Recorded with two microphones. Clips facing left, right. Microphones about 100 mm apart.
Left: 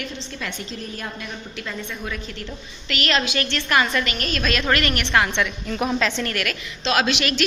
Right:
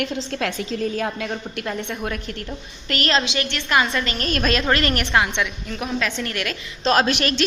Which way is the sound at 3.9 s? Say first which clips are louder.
Even; 30° right (ahead or behind).